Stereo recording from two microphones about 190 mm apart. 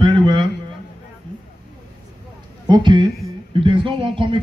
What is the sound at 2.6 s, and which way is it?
A man's voice, 25° right (ahead or behind).